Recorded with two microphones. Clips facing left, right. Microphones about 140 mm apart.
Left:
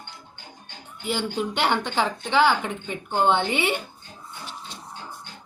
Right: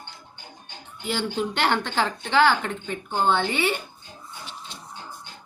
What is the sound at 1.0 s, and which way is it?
A woman's voice, 10° left (ahead or behind).